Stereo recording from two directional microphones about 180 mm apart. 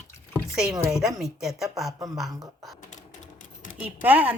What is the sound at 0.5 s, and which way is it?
Speech, 5° right (ahead or behind).